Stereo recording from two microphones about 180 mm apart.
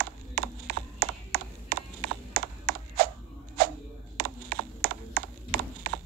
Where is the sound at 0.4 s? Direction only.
55° right (ahead or behind).